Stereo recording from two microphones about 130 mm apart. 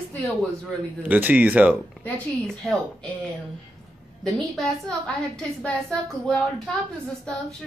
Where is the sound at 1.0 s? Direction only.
15° right (ahead or behind).